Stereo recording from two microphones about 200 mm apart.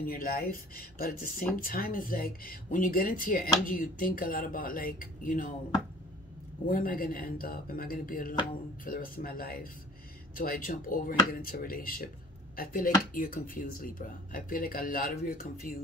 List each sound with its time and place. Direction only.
0.0 s speech: 45° left (ahead or behind)
6.6 s speech: 45° left (ahead or behind)